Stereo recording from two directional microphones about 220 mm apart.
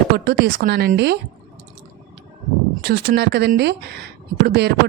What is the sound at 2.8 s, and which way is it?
A woman's voice, 45° right (ahead or behind).